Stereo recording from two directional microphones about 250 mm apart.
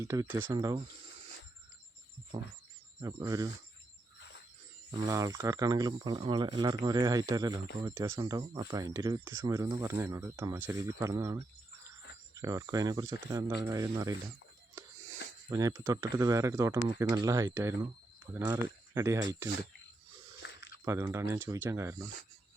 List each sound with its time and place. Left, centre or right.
0.0 s speech: centre
3.0 s speech: centre
5.0 s speech: centre
15.4 s speech: centre
20.4 s chewing: left
20.8 s speech: centre